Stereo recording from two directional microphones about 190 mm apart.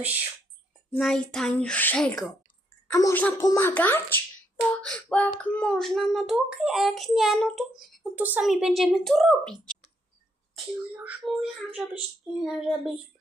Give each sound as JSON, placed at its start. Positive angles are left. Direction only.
{"t": 0.9, "sound": "a child's voice", "side_deg": 0}
{"t": 10.5, "sound": "a child's voice", "side_deg": -5}